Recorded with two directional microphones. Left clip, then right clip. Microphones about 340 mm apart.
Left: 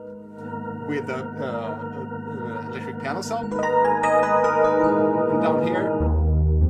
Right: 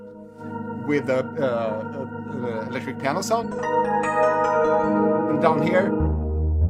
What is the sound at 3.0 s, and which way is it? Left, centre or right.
Speech, right.